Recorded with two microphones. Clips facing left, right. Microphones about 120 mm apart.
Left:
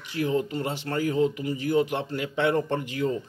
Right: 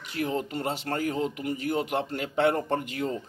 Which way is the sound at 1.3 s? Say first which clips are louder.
Left 4 dB; 55° right (ahead or behind).